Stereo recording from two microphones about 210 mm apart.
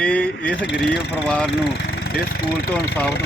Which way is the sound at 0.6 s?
50° left (ahead or behind).